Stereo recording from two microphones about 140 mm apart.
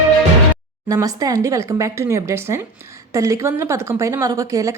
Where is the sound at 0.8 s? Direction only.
25° right (ahead or behind).